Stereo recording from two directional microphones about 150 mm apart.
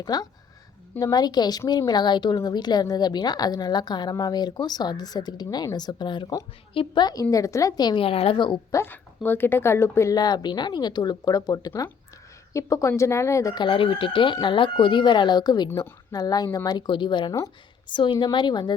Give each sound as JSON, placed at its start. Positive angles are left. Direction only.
{"t": 0.0, "sound": "speech", "side_deg": 25}
{"t": 8.7, "sound": "a woman's voice", "side_deg": 15}